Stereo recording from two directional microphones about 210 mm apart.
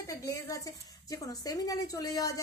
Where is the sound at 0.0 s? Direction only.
15° left (ahead or behind).